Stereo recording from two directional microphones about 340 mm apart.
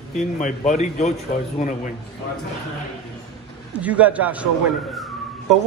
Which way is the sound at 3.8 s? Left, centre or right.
Centre.